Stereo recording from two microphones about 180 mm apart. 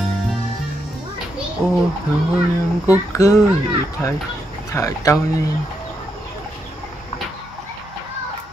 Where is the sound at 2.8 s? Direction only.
15° left (ahead or behind).